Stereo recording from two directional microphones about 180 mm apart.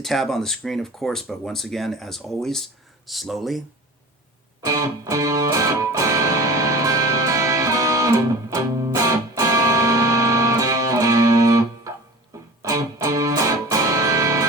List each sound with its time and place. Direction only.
0.0 s speech: centre (ahead or behind)
4.6 s music: 20° right (ahead or behind)